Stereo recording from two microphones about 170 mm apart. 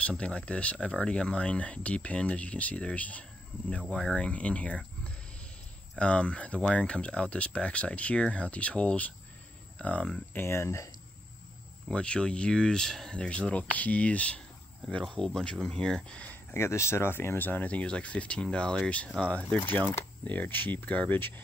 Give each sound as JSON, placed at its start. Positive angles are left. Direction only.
{"t": 0.0, "sound": "speech", "side_deg": 5}
{"t": 11.9, "sound": "speech", "side_deg": 5}